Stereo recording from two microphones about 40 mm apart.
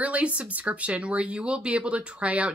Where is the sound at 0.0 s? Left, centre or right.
Right.